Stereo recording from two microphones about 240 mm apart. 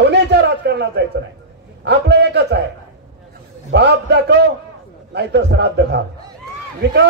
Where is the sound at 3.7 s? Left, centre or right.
Right.